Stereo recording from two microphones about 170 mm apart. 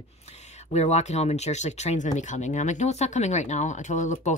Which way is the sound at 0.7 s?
40° left (ahead or behind).